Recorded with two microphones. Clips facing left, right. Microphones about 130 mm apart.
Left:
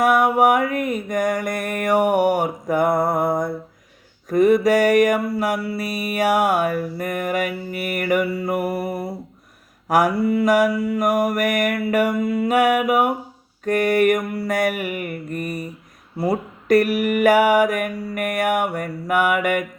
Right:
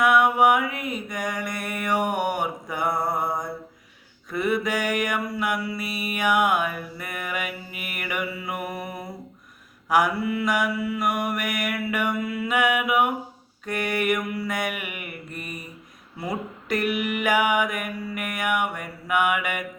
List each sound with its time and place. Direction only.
0.0 s mantra: 45° left (ahead or behind)
4.3 s mantra: 40° left (ahead or behind)
16.6 s mantra: 45° left (ahead or behind)